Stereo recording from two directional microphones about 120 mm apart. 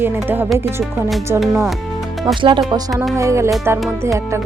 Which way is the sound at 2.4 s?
40° right (ahead or behind).